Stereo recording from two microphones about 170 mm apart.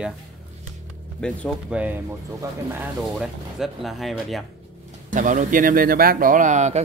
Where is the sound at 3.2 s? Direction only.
Centre (ahead or behind).